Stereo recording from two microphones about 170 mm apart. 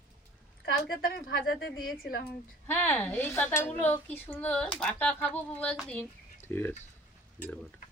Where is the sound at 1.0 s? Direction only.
60° left (ahead or behind).